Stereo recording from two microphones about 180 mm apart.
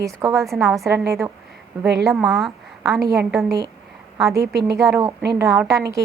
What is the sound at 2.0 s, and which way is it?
A woman's voice, centre (ahead or behind).